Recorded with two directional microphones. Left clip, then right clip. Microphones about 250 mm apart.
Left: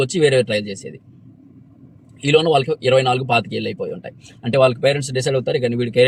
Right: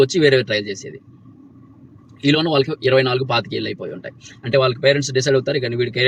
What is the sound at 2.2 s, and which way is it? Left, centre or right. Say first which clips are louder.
Speech: left 2 dB; centre.